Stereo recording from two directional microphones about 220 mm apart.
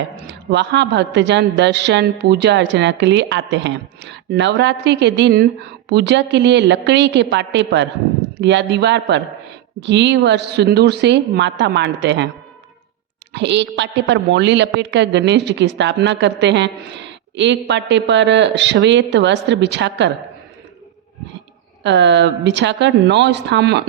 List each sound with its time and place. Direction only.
0.2 s a woman's voice: 55° right (ahead or behind)
13.3 s a woman's voice: 55° right (ahead or behind)
21.8 s a woman's voice: 55° right (ahead or behind)